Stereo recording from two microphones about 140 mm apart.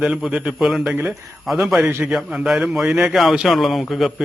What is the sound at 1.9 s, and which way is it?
Speech, 15° right (ahead or behind).